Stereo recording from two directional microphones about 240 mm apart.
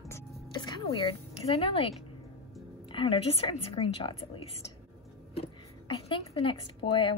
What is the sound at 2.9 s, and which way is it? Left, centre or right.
A woman's voice, left.